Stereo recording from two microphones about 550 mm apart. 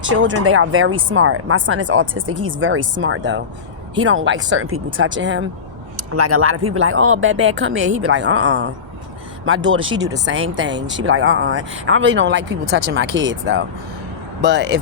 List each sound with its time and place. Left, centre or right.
0.0 s speech: centre
9.9 s speech: centre
10.5 s speech: centre